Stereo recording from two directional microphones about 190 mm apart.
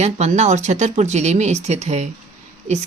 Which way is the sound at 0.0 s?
35° right (ahead or behind).